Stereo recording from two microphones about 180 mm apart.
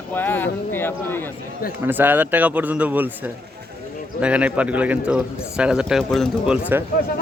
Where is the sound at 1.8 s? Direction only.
10° right (ahead or behind).